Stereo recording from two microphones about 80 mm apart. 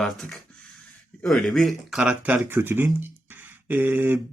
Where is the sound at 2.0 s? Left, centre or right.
Centre.